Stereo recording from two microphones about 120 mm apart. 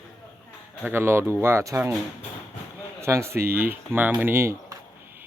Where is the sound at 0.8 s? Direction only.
20° right (ahead or behind).